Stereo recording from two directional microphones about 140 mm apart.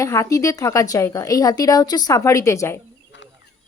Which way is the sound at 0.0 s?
20° left (ahead or behind).